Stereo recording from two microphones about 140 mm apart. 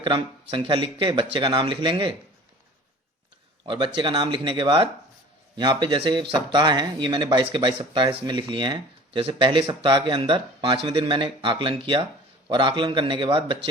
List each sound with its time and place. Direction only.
0.0 s speech: 35° right (ahead or behind)
3.7 s speech: 35° right (ahead or behind)